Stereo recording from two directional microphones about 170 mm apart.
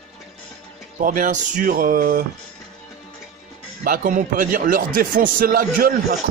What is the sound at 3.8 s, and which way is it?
A man's voice, 55° right (ahead or behind).